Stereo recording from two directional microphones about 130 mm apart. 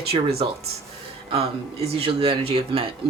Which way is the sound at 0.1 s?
50° right (ahead or behind).